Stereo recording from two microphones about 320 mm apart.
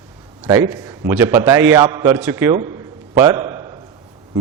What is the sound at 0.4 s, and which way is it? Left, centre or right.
A man's voice, centre.